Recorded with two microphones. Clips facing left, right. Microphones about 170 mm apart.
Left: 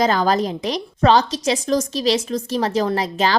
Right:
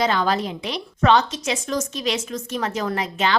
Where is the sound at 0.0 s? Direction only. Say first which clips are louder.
Left 3 dB; 40° left (ahead or behind).